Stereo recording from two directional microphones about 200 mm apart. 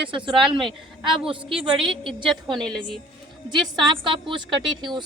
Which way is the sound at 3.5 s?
20° right (ahead or behind).